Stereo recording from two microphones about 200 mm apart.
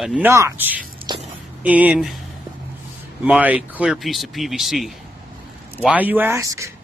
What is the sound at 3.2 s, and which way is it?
Speech, 10° right (ahead or behind).